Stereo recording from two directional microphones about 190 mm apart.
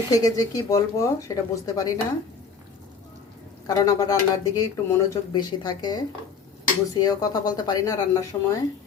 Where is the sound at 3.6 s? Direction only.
20° left (ahead or behind).